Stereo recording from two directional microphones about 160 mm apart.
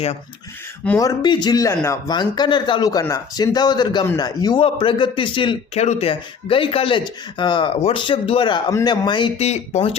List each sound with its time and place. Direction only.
0.9 s a man's voice: 25° left (ahead or behind); by 9.9 s 40° left (ahead or behind)